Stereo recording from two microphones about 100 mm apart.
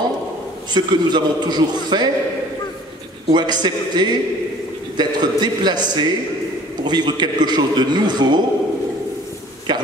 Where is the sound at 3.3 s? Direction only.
45° right (ahead or behind).